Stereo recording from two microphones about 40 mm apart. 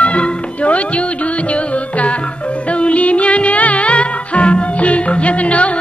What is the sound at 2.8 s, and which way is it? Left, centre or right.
Music, left.